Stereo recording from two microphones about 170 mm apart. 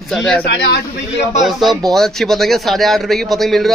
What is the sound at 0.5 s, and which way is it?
Speech, 70° left (ahead or behind).